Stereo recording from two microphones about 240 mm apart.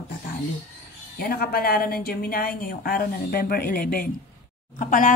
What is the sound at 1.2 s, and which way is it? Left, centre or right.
A woman's voice, left.